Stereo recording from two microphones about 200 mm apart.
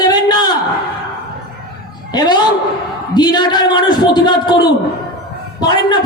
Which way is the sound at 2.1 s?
20° left (ahead or behind).